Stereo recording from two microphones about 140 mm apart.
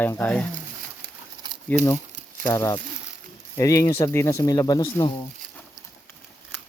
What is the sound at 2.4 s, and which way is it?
Speech, 15° left (ahead or behind).